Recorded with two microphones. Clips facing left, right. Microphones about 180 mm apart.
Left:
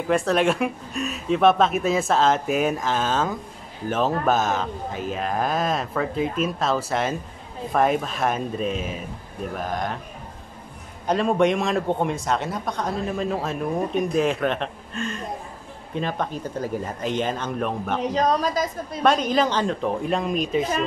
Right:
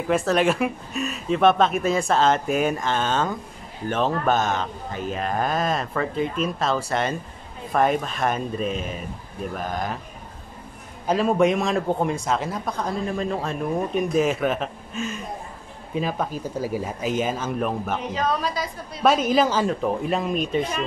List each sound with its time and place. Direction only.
0.1 s a man's voice: centre (ahead or behind)
11.1 s a man's voice: centre (ahead or behind)
18.1 s a woman's voice: 40° left (ahead or behind)
19.0 s a man's voice: 5° right (ahead or behind)